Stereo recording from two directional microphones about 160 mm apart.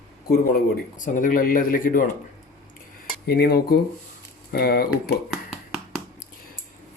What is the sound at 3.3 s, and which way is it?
Speech, 80° left.